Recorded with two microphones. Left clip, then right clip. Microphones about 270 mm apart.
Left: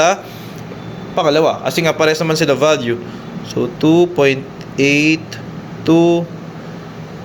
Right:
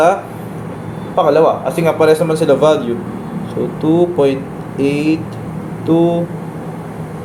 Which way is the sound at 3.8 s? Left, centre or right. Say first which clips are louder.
Left 1 dB; left.